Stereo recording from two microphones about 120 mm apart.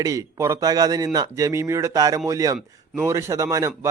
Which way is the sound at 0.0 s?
25° right (ahead or behind).